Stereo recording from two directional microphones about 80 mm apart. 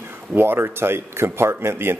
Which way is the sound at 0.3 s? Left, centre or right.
Right.